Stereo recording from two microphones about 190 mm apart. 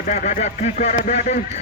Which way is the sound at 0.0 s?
40° left (ahead or behind).